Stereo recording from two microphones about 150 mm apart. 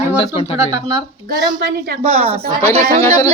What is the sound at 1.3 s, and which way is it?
Speech, 90° right.